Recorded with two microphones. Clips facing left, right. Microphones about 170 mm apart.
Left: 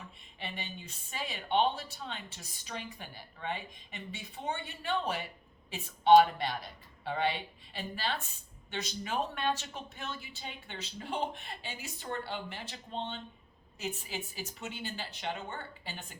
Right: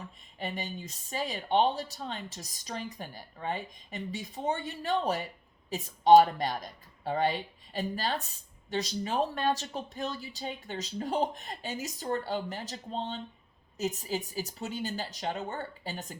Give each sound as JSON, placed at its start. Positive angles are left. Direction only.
{"t": 0.3, "sound": "speech", "side_deg": -40}